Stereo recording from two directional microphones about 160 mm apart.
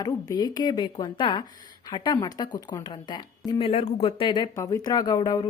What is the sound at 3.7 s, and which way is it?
Speech, 40° left (ahead or behind).